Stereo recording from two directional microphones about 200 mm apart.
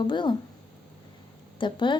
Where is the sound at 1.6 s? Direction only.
25° left (ahead or behind).